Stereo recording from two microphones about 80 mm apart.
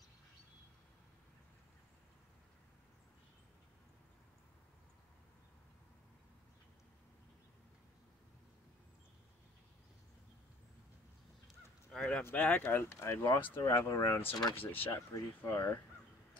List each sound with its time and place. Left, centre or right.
11.4 s honk: centre
12.2 s speech: left
14.5 s speech: left
15.1 s speech: left